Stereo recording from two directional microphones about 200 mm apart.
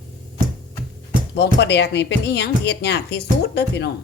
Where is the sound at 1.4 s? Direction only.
60° left (ahead or behind).